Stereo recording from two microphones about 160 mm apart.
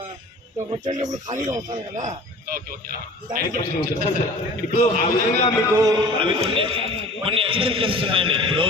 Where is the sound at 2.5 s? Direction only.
60° right (ahead or behind).